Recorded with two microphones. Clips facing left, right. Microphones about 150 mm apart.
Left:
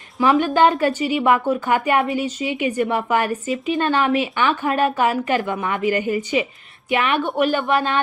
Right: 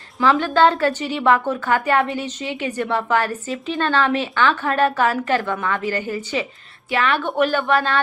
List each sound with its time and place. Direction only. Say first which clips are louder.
0.2 s a woman's voice: left 1 dB; 15° left (ahead or behind)